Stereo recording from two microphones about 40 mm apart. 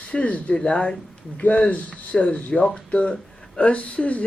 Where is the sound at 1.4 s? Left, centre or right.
Left.